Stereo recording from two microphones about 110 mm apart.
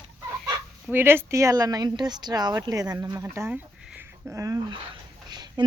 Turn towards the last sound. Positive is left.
turn(degrees=-40)  # may be behind; listen again after turning